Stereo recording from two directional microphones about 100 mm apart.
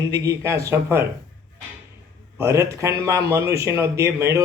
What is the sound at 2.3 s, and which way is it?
Speech, 30° right (ahead or behind).